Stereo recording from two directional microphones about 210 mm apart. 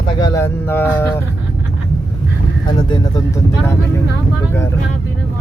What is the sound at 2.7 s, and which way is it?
Pigeon, 20° left (ahead or behind).